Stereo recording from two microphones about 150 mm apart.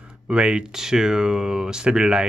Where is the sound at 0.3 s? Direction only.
5° right (ahead or behind).